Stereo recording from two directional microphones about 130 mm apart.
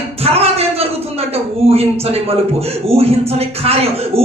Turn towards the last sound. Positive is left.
turn(degrees=-50)  # may be behind; listen again after turning